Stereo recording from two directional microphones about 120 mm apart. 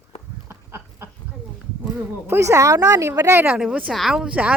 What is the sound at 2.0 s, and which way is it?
Speech, 20° right (ahead or behind).